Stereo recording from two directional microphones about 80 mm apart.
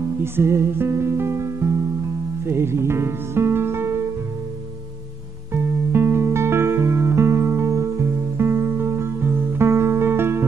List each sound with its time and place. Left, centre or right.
0.2 s music: right
5.5 s music: right